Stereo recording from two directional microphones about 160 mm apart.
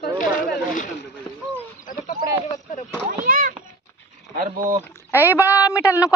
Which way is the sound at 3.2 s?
60° right (ahead or behind).